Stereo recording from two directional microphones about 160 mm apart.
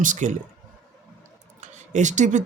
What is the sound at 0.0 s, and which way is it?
Speech, 50° right (ahead or behind).